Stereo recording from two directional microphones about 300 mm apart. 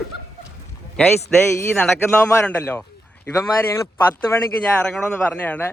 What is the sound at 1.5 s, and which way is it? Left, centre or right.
A man's voice, centre.